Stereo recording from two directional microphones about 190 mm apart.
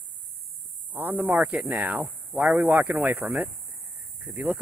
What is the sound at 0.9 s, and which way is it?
Speech, 10° right (ahead or behind).